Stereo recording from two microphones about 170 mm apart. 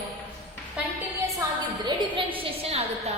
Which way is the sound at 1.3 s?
25° right (ahead or behind).